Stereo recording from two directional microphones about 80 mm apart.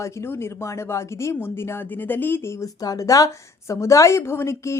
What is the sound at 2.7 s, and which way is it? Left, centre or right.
A woman's voice, left.